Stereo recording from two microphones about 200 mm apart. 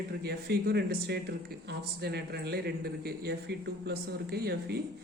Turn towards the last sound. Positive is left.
turn(degrees=-50)  # may be behind; listen again after turning